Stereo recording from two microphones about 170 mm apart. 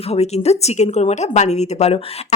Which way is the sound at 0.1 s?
40° left (ahead or behind).